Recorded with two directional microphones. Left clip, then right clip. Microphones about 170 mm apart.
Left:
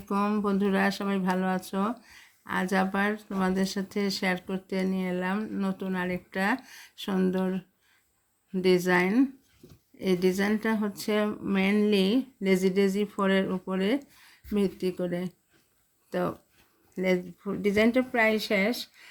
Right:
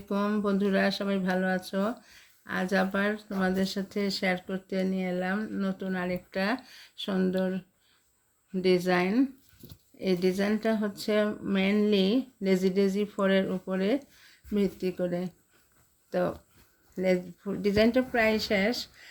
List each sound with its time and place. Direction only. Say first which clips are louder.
0.1 s speech: left 1 dB; 25° left (ahead or behind)